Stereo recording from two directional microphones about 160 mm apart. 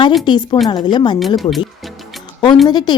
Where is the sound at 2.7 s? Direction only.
25° left (ahead or behind).